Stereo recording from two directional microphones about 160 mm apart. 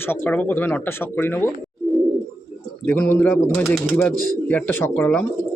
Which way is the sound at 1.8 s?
Centre (ahead or behind).